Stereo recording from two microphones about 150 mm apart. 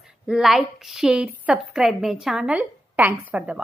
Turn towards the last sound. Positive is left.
turn(degrees=-10)  # may be behind; listen again after turning